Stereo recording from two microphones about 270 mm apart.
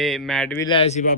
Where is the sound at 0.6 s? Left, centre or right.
Left.